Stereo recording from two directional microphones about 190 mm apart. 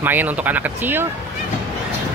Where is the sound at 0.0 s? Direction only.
10° right (ahead or behind).